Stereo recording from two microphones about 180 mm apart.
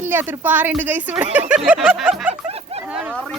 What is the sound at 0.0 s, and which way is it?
Speech, 10° right (ahead or behind).